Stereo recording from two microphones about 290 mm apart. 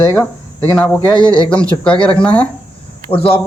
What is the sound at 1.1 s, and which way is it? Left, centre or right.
Speech, centre.